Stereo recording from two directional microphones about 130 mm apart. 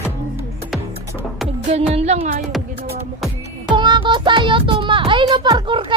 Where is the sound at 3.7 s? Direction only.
35° right (ahead or behind).